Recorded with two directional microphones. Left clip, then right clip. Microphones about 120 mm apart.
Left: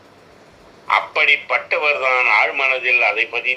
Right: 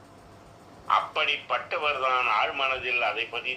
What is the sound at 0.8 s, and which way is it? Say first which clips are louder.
Speech: left 9 dB; 45° left (ahead or behind).